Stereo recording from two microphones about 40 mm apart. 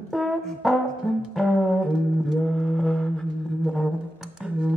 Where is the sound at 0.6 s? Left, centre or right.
Centre.